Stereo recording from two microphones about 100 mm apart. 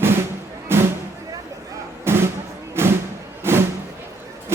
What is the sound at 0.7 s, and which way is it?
Music, 25° right (ahead or behind).